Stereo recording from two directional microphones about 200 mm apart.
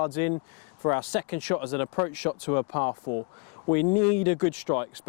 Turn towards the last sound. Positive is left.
turn(degrees=15)  # may be behind; listen again after turning